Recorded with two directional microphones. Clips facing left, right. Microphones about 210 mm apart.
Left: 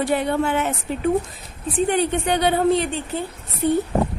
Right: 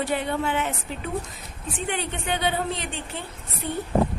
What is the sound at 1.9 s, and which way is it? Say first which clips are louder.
A woman's voice: left 6 dB; 45° left (ahead or behind).